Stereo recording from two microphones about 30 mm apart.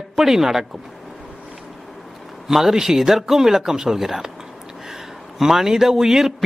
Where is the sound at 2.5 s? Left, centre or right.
Centre.